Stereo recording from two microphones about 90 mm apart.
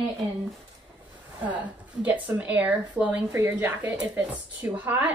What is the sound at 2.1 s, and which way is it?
Speech, 15° right (ahead or behind).